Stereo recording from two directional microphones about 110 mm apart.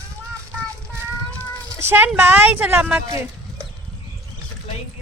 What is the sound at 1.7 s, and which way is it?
Speech, 20° right (ahead or behind).